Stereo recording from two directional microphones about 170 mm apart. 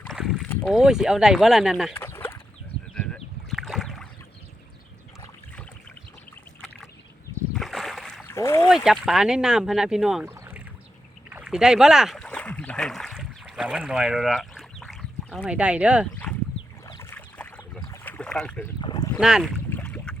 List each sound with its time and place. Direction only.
0.0 s boat: centre (ahead or behind)
0.4 s speech: centre (ahead or behind)
1.9 s chicken: 15° left (ahead or behind)
2.9 s a sound: 5° left (ahead or behind)
7.5 s boat: centre (ahead or behind)
8.3 s a sound: 15° left (ahead or behind)
8.6 s speech: 5° right (ahead or behind)
10.3 s rowboat: 15° right (ahead or behind)
11.3 s rowboat: 5° right (ahead or behind)
16.8 s boat: 15° left (ahead or behind)
18.8 s boat: 25° left (ahead or behind)
19.2 s speech: 5° right (ahead or behind)
19.7 s boat: 5° left (ahead or behind)